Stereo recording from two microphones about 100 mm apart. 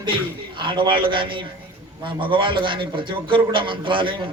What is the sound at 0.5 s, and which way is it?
A man's voice, 55° right (ahead or behind).